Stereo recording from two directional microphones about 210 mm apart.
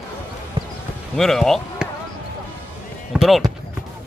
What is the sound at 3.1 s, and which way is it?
Basketball bounce, centre (ahead or behind).